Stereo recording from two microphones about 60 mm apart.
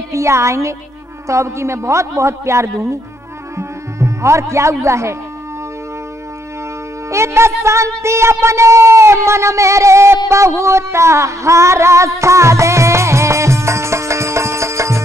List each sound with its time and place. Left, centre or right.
0.1 s speech: right
7.1 s speech: right
12.2 s music: right